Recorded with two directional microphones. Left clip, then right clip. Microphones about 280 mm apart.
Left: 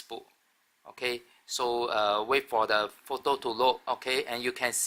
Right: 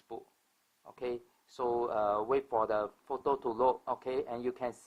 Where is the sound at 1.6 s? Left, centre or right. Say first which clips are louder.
Left 3 dB; right.